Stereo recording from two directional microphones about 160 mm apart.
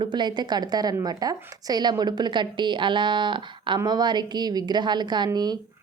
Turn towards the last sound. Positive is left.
turn(degrees=-25)  # may be behind; listen again after turning